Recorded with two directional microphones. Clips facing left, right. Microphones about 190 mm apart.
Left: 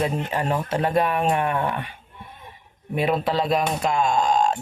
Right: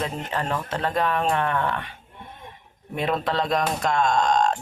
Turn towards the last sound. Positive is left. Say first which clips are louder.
# even
turn(degrees=5)  # may be behind; listen again after turning